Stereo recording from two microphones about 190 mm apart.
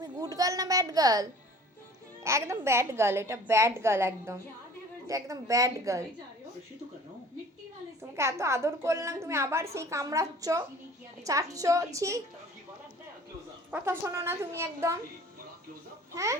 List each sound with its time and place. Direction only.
0.0 s a child's voice: 20° right (ahead or behind)
8.1 s a woman's voice: 15° right (ahead or behind)
13.7 s a woman's voice: 10° right (ahead or behind)
16.1 s a woman's voice: 15° right (ahead or behind)